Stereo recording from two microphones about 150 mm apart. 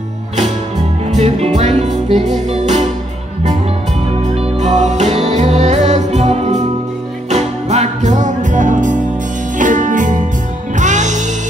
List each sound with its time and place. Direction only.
1.0 s music: 45° right (ahead or behind)
4.4 s music: 50° right (ahead or behind)